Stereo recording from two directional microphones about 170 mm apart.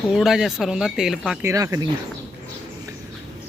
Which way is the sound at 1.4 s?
15° right (ahead or behind).